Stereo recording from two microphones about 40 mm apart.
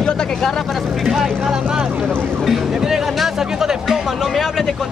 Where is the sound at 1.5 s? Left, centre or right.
Right.